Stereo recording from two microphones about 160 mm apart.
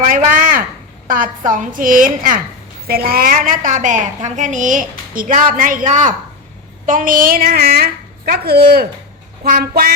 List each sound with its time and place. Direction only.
0.0 s a woman's voice: 55° right (ahead or behind)
2.8 s a woman's voice: 70° right (ahead or behind)